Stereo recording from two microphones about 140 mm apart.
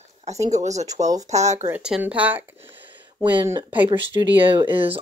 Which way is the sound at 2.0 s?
10° right (ahead or behind).